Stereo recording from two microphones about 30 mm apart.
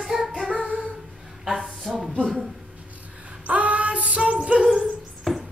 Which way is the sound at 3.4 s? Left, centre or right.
Right.